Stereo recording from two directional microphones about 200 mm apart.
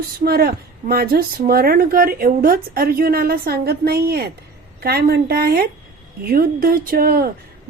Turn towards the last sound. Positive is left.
turn(degrees=-50)  # may be behind; listen again after turning